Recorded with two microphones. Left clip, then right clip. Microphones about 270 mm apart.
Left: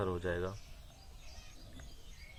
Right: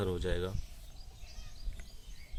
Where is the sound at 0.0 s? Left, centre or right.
Right.